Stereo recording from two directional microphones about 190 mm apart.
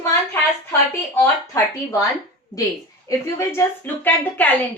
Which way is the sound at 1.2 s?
15° left (ahead or behind).